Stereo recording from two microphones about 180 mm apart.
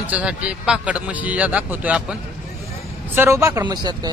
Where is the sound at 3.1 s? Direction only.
15° right (ahead or behind).